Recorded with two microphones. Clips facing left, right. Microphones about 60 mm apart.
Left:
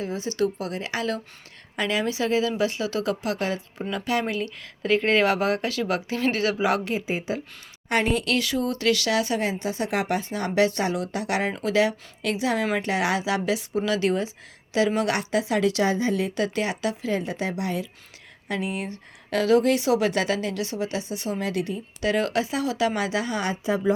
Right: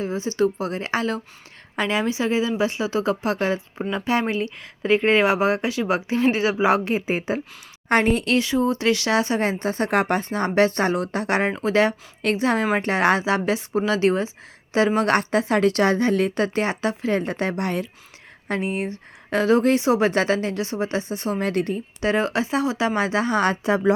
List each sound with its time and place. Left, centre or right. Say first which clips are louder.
0.0 s a woman's voice: right 4 dB; right
16.3 s a woman's voice: right 3 dB; right
18.4 s speech: right 4 dB; right
22.0 s speech: right 2 dB; right
23.5 s speech: right 4 dB; right